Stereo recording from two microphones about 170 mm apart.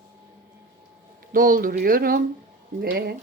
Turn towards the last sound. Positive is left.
turn(degrees=-70)  # may be behind; listen again after turning